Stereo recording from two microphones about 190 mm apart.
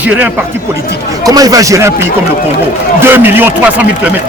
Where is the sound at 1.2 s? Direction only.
20° right (ahead or behind).